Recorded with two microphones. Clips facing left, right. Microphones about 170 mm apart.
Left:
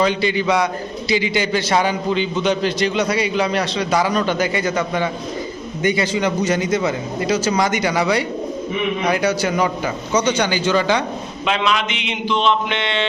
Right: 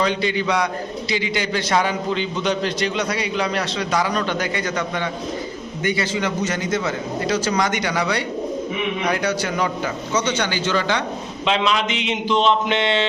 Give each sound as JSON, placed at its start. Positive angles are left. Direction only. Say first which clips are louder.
{"t": 0.0, "sound": "a man's voice", "louder": "left 3 dB", "side_deg": 5}
{"t": 11.5, "sound": "mantra", "louder": "even", "side_deg": -35}